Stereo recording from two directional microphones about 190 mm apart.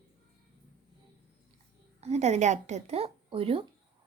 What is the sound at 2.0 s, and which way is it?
Speech, 35° right (ahead or behind).